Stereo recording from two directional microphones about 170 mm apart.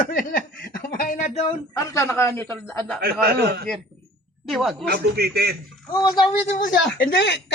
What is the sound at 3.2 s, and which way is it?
Speech, 70° right (ahead or behind).